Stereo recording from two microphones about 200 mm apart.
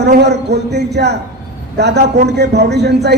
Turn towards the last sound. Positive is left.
turn(degrees=-55)  # may be behind; listen again after turning